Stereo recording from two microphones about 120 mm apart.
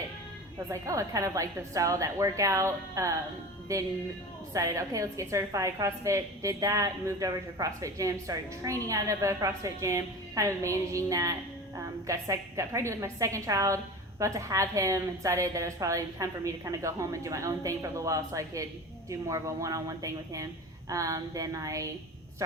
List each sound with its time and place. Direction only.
0.7 s a woman's voice: 25° right (ahead or behind)